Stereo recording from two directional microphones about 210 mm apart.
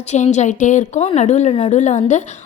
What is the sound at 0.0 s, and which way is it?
A woman's voice, 35° left (ahead or behind).